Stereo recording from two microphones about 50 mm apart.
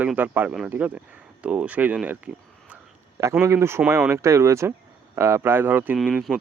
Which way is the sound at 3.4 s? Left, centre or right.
Right.